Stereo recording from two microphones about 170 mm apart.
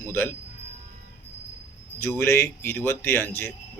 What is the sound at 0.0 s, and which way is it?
Speech, 15° left (ahead or behind).